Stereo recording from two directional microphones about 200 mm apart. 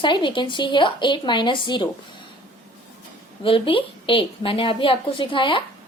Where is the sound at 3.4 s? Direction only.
25° left (ahead or behind).